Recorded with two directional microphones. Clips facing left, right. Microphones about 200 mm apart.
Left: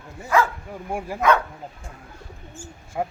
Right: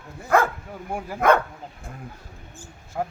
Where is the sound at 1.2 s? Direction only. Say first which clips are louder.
Right 1 dB; 55° right (ahead or behind).